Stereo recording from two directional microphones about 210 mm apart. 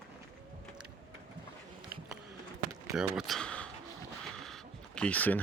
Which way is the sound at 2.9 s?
5° right (ahead or behind).